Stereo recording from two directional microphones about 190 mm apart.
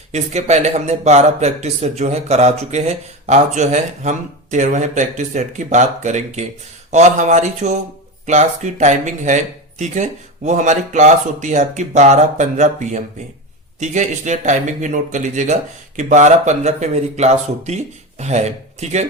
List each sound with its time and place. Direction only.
0.1 s speech: 35° right (ahead or behind)